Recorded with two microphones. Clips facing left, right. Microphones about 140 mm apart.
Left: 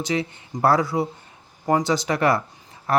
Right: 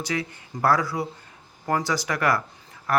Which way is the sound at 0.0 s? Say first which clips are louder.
Left 4 dB; 25° left (ahead or behind).